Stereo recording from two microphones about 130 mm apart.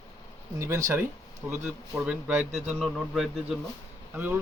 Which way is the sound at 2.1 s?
10° right (ahead or behind).